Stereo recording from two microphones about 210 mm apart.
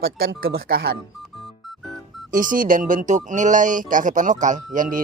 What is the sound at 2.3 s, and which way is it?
Speech, 40° right (ahead or behind).